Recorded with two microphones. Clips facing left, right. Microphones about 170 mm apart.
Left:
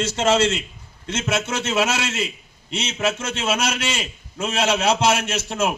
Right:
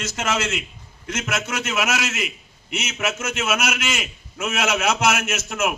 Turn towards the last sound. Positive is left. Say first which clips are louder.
# left 1 dB
turn(degrees=30)  # may be behind; listen again after turning